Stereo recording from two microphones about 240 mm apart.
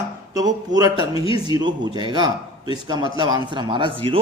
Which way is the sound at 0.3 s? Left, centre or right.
Centre.